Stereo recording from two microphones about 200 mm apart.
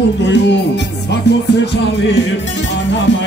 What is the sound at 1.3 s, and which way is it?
Music, 55° left (ahead or behind).